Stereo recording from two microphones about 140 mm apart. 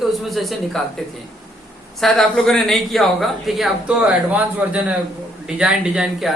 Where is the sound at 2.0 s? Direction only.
5° left (ahead or behind).